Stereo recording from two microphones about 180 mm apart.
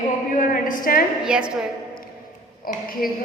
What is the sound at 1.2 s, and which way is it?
Speech, 5° right (ahead or behind).